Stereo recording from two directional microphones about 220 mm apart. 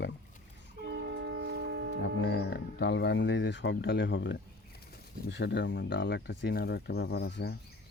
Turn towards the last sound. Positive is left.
turn(degrees=50)  # may be behind; listen again after turning